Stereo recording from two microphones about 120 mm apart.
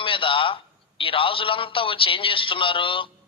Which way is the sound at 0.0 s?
45° left (ahead or behind).